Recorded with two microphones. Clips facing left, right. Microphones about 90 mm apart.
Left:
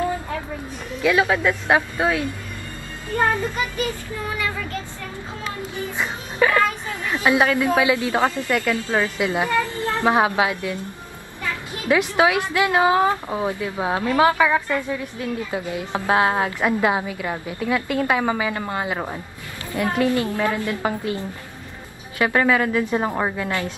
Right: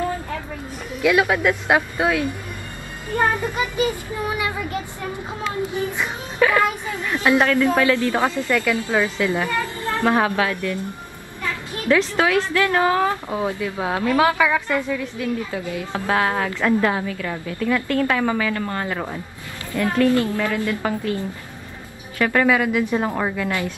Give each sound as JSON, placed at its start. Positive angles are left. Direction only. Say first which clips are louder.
{"t": 1.0, "sound": "speech", "louder": "right 1 dB", "side_deg": -5}
{"t": 3.2, "sound": "speech", "louder": "right 1 dB", "side_deg": -15}
{"t": 5.9, "sound": "music", "louder": "left 2 dB", "side_deg": 0}
{"t": 7.1, "sound": "a woman's voice", "louder": "right 1 dB", "side_deg": 10}
{"t": 11.9, "sound": "a woman's voice", "louder": "even", "side_deg": 15}
{"t": 14.9, "sound": "a woman's voice", "louder": "right 2 dB", "side_deg": 20}
{"t": 22.2, "sound": "a woman's voice", "louder": "right 1 dB", "side_deg": 15}
{"t": 22.5, "sound": "a woman's voice", "louder": "right 1 dB", "side_deg": -10}
{"t": 22.8, "sound": "a woman's voice", "louder": "even", "side_deg": 15}